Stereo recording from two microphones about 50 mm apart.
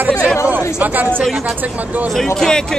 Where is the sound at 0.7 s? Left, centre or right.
Right.